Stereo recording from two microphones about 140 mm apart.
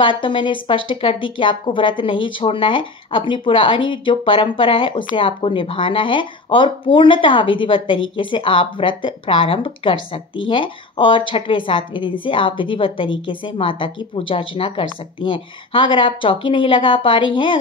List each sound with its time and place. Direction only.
0.0 s speech: 35° left (ahead or behind)